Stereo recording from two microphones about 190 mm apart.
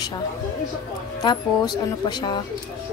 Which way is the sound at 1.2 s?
20° left (ahead or behind).